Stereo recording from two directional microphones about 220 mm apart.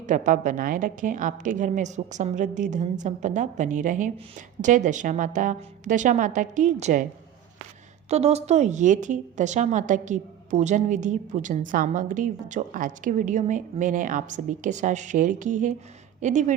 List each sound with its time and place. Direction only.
0.0 s a woman's voice: 35° right (ahead or behind)
8.1 s a woman's voice: 30° right (ahead or behind)